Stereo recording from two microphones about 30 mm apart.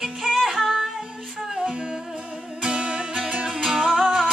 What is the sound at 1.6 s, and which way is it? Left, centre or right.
Humming, right.